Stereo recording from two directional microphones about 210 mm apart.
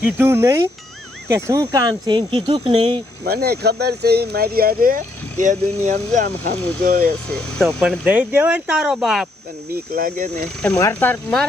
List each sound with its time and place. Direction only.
0.0 s speech: 10° right (ahead or behind)
3.2 s speech: 50° right (ahead or behind)
7.3 s speech: centre (ahead or behind)
9.7 s speech: 45° right (ahead or behind)
10.8 s speech: 10° left (ahead or behind)